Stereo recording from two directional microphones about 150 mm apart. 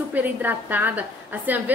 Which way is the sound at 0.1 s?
10° right (ahead or behind).